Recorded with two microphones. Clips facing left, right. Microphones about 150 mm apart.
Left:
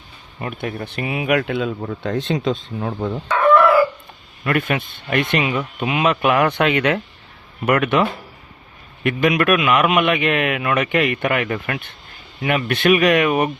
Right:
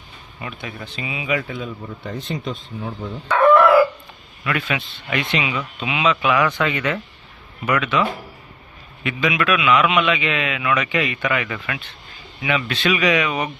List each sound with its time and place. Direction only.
0.3 s speech: 50° left (ahead or behind); by 3.2 s 75° left (ahead or behind)
4.4 s a man's voice: 50° left (ahead or behind); by 7.0 s 70° left (ahead or behind)
7.6 s a man's voice: 55° left (ahead or behind)
9.0 s a man's voice: 55° left (ahead or behind)